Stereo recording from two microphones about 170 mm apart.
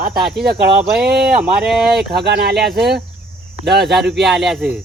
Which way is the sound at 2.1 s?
75° right (ahead or behind).